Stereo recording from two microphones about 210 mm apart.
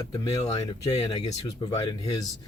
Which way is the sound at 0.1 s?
15° left (ahead or behind).